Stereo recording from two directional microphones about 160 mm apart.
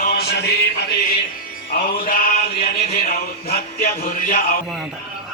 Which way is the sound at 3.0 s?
70° left (ahead or behind).